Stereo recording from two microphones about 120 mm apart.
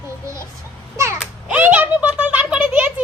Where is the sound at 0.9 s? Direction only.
25° right (ahead or behind).